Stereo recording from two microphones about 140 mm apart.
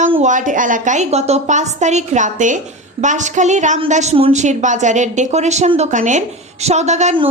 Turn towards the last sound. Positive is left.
turn(degrees=-55)  # may be behind; listen again after turning